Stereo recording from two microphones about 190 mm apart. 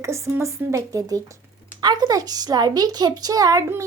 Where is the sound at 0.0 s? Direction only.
15° right (ahead or behind).